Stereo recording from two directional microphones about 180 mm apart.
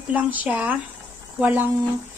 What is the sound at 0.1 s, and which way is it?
Speech, 10° right (ahead or behind).